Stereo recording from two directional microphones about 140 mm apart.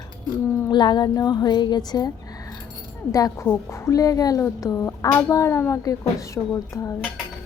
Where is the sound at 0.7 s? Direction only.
30° left (ahead or behind).